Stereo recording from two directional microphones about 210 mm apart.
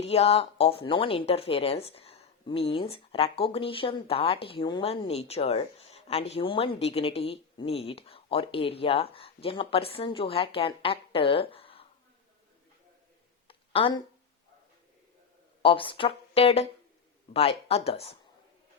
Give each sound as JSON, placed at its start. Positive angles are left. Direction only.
{"t": 0.0, "sound": "speech", "side_deg": 30}
{"t": 13.5, "sound": "a sound", "side_deg": 25}
{"t": 15.6, "sound": "speech", "side_deg": 25}